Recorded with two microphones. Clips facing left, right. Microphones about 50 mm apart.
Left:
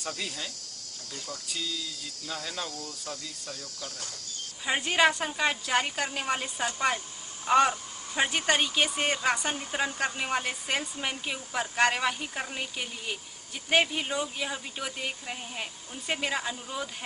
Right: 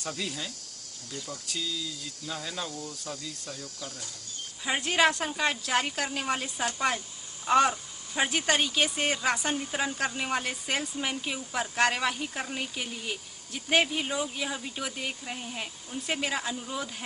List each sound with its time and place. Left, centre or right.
0.2 s speech: centre
1.1 s speech: centre
1.5 s speech: centre
4.6 s speech: centre